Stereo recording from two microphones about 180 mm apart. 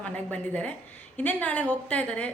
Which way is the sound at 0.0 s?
5° left (ahead or behind).